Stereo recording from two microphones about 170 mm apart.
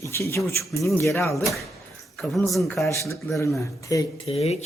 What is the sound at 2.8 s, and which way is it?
Speech, 15° left (ahead or behind).